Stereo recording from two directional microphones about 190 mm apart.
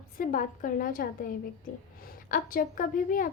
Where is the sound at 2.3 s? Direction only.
45° left (ahead or behind).